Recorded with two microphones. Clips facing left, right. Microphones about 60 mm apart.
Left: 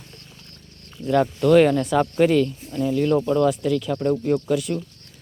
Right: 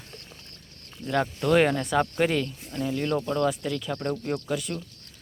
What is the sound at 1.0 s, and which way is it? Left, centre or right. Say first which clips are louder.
Speech: left 7 dB; centre.